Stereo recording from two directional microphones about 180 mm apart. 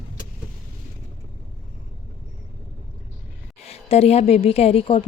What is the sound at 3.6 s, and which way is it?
A woman's voice, 35° left (ahead or behind).